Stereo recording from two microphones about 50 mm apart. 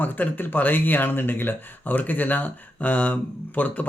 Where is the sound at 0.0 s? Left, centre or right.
Left.